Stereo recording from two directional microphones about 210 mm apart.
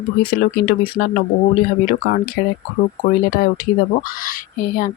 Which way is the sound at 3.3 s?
45° left (ahead or behind).